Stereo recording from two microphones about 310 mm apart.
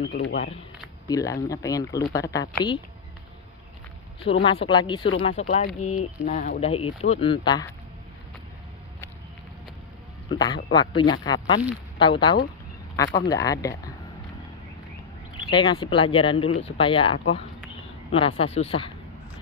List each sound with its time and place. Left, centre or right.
0.0 s speech: left
1.0 s speech: centre
4.5 s speech: centre
10.3 s speech: centre
15.5 s speech: centre